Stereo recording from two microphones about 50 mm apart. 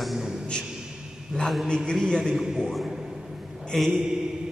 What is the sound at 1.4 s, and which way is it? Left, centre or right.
Speech, centre.